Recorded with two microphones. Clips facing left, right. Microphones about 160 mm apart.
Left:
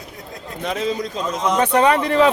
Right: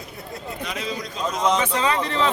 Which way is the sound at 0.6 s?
45° left (ahead or behind).